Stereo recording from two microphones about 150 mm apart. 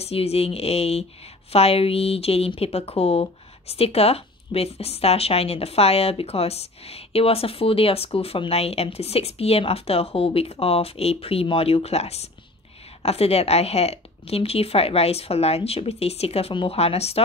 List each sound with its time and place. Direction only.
0.0 s speech: 40° left (ahead or behind)